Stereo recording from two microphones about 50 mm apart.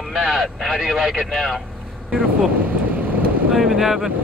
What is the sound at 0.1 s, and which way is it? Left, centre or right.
Speech, centre.